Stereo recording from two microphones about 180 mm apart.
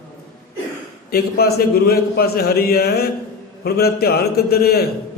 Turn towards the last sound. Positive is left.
turn(degrees=60)  # may be behind; listen again after turning